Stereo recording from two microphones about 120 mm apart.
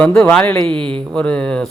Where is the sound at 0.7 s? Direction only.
45° right (ahead or behind).